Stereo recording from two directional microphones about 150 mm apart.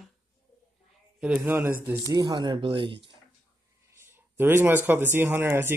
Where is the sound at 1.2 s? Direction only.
10° right (ahead or behind); by 3.0 s 35° right (ahead or behind).